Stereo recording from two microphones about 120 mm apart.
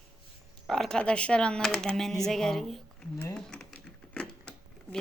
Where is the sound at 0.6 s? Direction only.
5° left (ahead or behind).